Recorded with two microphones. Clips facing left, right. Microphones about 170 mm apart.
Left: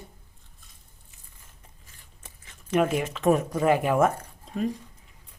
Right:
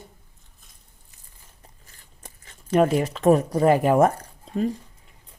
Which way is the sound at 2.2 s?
40° right (ahead or behind).